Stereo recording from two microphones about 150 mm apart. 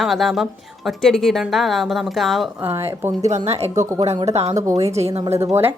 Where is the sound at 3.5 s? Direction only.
45° right (ahead or behind).